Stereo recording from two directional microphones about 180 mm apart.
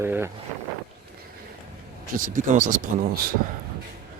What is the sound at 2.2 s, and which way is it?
Speech, 45° right (ahead or behind).